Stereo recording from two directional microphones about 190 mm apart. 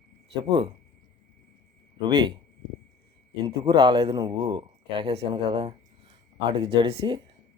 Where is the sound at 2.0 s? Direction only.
25° right (ahead or behind).